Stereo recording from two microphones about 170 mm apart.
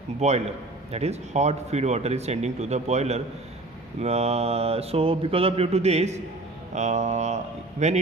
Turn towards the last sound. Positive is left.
turn(degrees=-45)  # may be behind; listen again after turning